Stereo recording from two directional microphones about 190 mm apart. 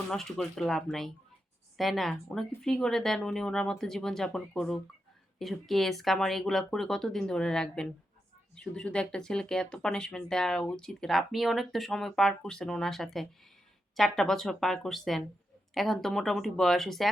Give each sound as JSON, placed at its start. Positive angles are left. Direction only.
{"t": 0.1, "sound": "speech", "side_deg": 0}